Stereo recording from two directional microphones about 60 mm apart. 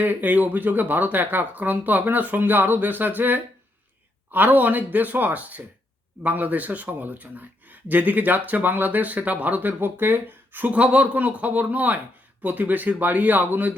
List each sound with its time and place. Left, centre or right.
0.0 s speech: right